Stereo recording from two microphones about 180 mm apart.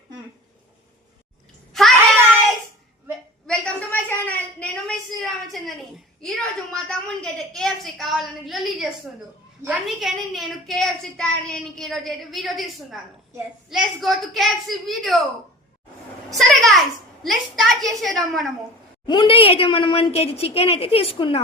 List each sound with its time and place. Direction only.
1.7 s child singing: centre (ahead or behind)
3.4 s a sound: 5° left (ahead or behind)
9.6 s a woman's voice: centre (ahead or behind)
16.4 s a sound: centre (ahead or behind)
17.2 s a woman's voice: centre (ahead or behind)
19.0 s a woman's voice: 25° left (ahead or behind)